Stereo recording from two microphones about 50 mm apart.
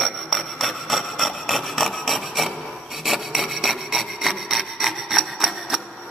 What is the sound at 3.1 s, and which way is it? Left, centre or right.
Wood, centre.